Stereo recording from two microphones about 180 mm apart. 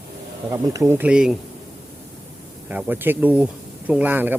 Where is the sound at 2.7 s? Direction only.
10° right (ahead or behind).